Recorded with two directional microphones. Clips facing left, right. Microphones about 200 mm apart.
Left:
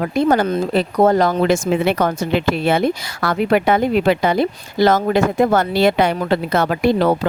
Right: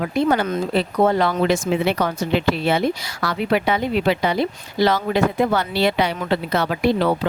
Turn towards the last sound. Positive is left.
turn(degrees=45)  # may be behind; listen again after turning